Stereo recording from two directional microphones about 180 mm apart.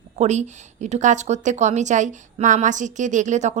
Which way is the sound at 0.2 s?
40° right (ahead or behind).